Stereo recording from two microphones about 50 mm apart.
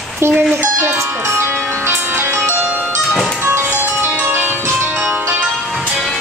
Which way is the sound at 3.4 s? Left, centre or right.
Right.